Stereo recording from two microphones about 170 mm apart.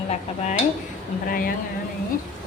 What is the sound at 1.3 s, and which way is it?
Speech, 60° left (ahead or behind).